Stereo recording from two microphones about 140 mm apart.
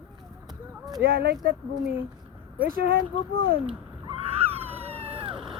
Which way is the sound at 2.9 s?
90° right.